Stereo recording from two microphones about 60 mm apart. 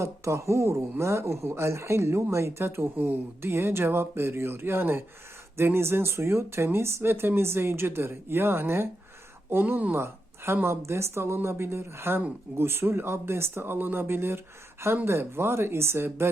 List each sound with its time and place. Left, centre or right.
0.0 s speech: right
10.0 s speech: right